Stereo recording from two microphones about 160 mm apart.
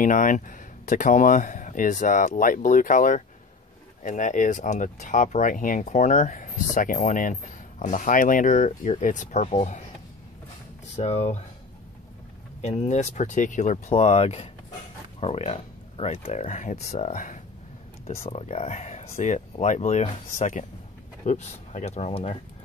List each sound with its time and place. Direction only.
0.0 s speech: 55° left (ahead or behind)
11.0 s speech: 45° left (ahead or behind)
12.6 s speech: 45° left (ahead or behind)